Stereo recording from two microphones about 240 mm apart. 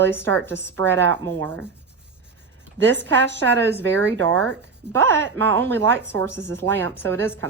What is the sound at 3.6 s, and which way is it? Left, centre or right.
Speech, centre.